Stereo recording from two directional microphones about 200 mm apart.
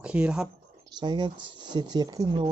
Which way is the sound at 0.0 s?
5° right (ahead or behind).